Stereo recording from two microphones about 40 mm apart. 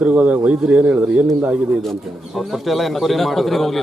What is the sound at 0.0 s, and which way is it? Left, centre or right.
Speech, right.